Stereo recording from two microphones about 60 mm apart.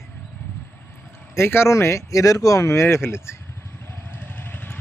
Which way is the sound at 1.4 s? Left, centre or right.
Left.